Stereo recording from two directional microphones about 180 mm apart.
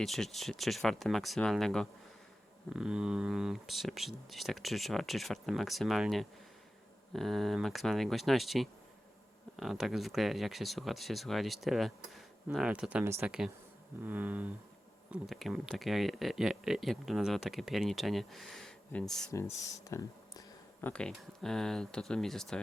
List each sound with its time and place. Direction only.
0.0 s speech: centre (ahead or behind)
14.0 s a sound: 10° right (ahead or behind)
15.1 s speech: centre (ahead or behind)
19.5 s speech: 20° left (ahead or behind)
20.8 s speech: 5° left (ahead or behind)